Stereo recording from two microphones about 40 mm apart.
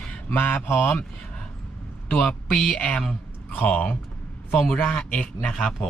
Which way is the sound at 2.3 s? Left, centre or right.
Left.